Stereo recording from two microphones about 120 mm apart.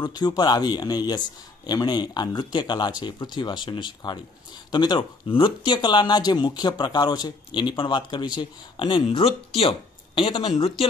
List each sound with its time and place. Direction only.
0.0 s speech: 35° left (ahead or behind)
9.2 s speech: 50° left (ahead or behind)